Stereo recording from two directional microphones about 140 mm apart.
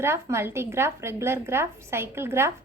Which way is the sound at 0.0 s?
20° right (ahead or behind).